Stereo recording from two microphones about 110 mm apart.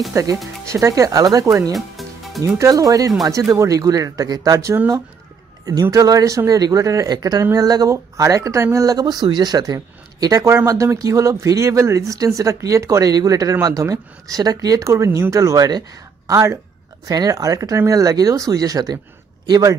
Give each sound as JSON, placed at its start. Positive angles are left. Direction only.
{"t": 0.1, "sound": "speech", "side_deg": -30}
{"t": 1.7, "sound": "music", "side_deg": 0}
{"t": 2.4, "sound": "speech", "side_deg": -30}